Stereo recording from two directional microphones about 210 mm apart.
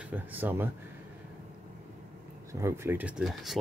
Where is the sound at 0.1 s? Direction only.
10° right (ahead or behind).